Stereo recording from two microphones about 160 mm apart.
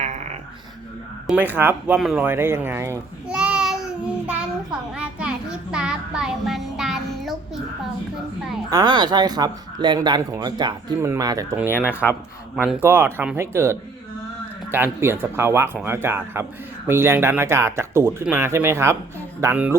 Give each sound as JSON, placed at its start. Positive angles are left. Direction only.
{"t": 0.0, "sound": "a sound", "side_deg": -50}
{"t": 1.3, "sound": "speech", "side_deg": -10}
{"t": 2.0, "sound": "speech", "side_deg": 0}
{"t": 2.2, "sound": "speech", "side_deg": -15}
{"t": 3.2, "sound": "child singing", "side_deg": -5}
{"t": 8.7, "sound": "speech", "side_deg": -25}
{"t": 11.5, "sound": "speech", "side_deg": -10}